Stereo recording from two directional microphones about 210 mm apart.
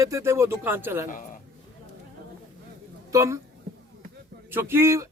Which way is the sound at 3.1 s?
15° right (ahead or behind).